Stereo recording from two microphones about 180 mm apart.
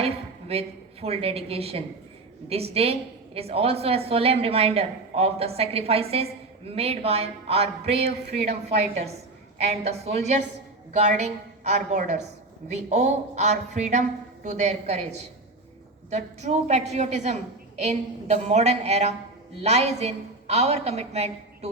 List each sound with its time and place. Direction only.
0.0 s a sound: 35° right (ahead or behind)
1.0 s a woman's voice: 35° right (ahead or behind)
9.6 s a woman's voice: 40° right (ahead or behind)
16.0 s a woman's voice: 40° right (ahead or behind)